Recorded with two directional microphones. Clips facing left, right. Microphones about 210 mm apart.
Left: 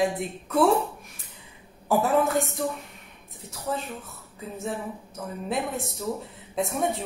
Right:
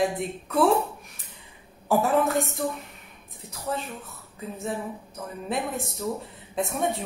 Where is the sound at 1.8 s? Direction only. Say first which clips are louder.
Even; centre (ahead or behind).